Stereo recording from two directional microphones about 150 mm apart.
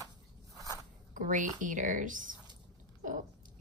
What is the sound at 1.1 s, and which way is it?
A woman's voice, 60° right (ahead or behind).